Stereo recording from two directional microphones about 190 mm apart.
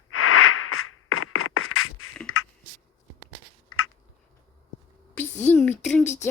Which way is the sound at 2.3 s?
90° left.